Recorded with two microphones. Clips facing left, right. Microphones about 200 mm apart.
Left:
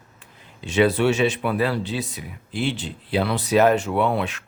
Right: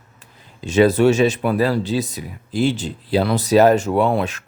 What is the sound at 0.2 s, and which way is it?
Speech, 40° right (ahead or behind).